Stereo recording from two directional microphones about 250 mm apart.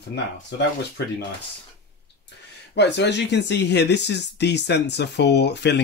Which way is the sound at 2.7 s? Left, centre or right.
Left.